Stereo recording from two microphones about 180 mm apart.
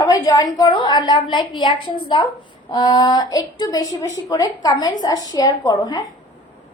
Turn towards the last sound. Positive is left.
turn(degrees=20)  # may be behind; listen again after turning